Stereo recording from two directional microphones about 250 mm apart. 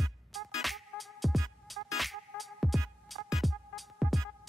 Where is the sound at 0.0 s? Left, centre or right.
Centre.